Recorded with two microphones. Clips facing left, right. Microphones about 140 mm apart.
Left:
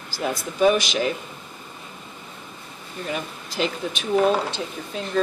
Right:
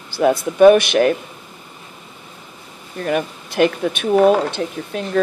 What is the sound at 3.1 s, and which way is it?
Speech, 60° right (ahead or behind).